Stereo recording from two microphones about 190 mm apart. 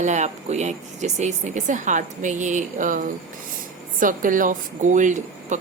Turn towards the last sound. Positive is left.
turn(degrees=-40)  # may be behind; listen again after turning